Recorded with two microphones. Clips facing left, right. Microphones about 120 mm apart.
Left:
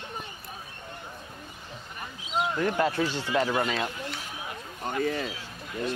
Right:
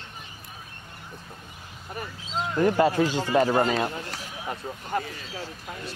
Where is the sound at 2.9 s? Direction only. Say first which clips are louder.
Right 5 dB; 45° right (ahead or behind).